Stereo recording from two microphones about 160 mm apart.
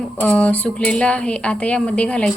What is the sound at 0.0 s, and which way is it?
A woman's voice, 10° left (ahead or behind).